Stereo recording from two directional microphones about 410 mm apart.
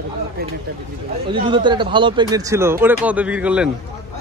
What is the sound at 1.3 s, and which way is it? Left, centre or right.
Speech, centre.